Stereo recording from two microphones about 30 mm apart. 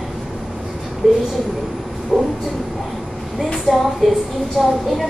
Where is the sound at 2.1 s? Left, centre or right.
Centre.